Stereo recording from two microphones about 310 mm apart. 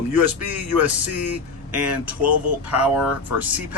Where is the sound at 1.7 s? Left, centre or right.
Right.